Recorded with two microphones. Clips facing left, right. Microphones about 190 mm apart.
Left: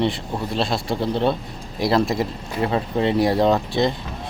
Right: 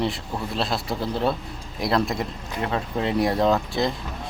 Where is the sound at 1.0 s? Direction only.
25° left (ahead or behind).